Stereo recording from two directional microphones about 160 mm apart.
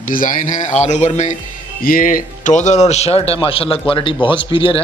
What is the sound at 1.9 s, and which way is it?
Speech, 60° left (ahead or behind).